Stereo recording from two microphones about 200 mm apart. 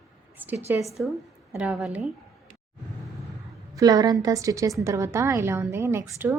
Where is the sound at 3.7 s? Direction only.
20° right (ahead or behind).